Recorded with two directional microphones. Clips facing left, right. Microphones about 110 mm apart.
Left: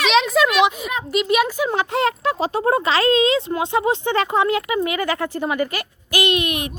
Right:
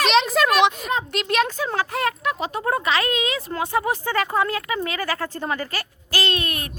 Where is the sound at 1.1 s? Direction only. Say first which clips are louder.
Left 7 dB; 5° left (ahead or behind).